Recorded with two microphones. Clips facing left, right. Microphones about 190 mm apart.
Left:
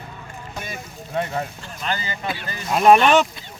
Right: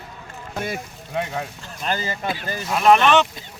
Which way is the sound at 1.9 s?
40° right (ahead or behind).